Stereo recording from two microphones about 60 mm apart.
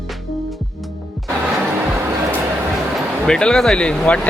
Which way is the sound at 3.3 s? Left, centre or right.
Centre.